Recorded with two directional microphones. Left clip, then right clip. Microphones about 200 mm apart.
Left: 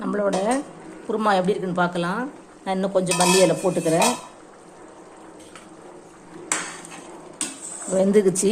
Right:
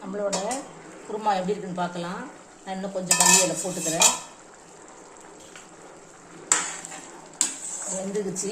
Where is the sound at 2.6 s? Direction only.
35° left (ahead or behind).